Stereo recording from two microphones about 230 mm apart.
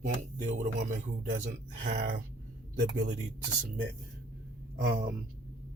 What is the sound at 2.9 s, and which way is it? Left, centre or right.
Speech, right.